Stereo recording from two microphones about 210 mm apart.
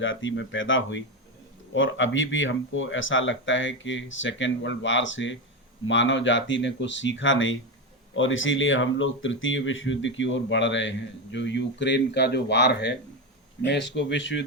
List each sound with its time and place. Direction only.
0.0 s speech: 65° left (ahead or behind)